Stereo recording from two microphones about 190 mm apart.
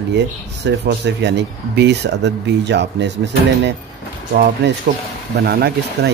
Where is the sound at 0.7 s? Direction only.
65° right (ahead or behind).